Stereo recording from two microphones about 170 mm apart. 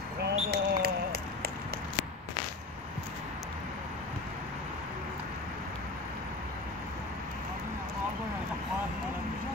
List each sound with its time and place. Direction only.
0.2 s basketball bounce: 70° right (ahead or behind)